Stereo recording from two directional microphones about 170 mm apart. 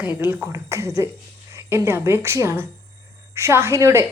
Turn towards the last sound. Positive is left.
turn(degrees=-15)  # may be behind; listen again after turning